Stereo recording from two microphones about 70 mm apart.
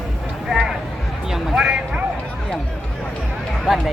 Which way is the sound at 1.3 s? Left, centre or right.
Centre.